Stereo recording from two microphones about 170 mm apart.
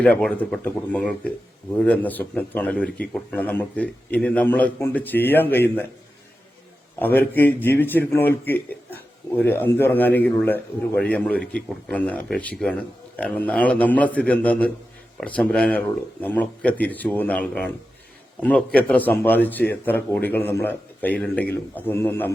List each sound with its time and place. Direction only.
0.0 s speech: 5° left (ahead or behind)
7.0 s speech: 10° left (ahead or behind)